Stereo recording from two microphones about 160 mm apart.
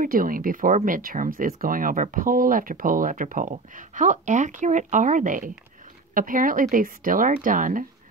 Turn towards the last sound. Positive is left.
turn(degrees=-55)  # may be behind; listen again after turning